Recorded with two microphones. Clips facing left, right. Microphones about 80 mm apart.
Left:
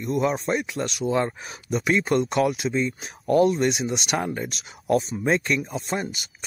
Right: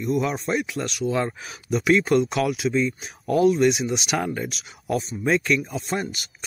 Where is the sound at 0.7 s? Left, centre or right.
Left.